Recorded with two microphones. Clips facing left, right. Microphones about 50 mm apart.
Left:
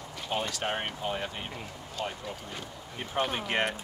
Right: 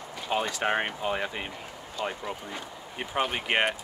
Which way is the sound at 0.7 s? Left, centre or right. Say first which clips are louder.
Right 5 dB; right.